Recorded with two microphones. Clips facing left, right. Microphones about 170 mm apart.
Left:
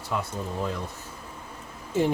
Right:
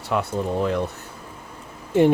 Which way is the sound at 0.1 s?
70° right (ahead or behind).